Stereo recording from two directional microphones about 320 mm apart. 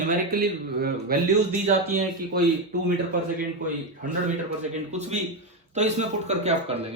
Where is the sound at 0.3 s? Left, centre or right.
Right.